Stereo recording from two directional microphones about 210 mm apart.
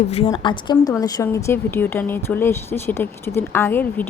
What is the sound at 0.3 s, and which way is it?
A woman's voice, 20° left (ahead or behind).